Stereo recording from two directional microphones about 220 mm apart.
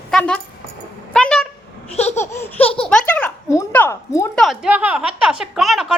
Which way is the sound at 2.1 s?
10° left (ahead or behind).